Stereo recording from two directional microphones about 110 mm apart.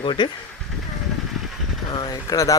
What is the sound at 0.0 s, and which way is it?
Speech, 50° left (ahead or behind).